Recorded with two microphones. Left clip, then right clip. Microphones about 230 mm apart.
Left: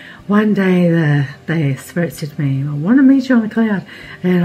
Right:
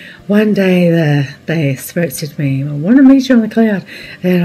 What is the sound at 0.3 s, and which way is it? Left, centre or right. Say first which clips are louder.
Speech: right 3 dB; centre.